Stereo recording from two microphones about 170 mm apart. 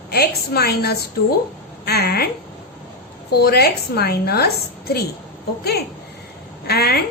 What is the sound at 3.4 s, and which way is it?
A woman's voice, 70° left (ahead or behind).